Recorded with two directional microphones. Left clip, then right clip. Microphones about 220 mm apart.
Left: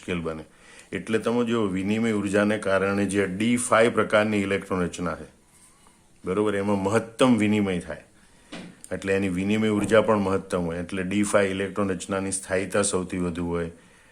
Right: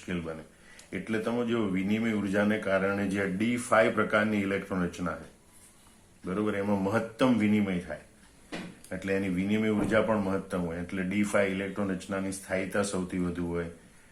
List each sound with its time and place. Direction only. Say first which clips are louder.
0.0 s speech: left 6 dB; 45° left (ahead or behind)
6.2 s speech: left 6 dB; 45° left (ahead or behind)